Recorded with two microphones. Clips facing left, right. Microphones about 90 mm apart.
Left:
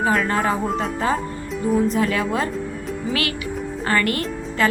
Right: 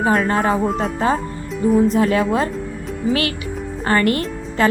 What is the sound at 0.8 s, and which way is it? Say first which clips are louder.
A woman's voice: right 3 dB; 30° right (ahead or behind).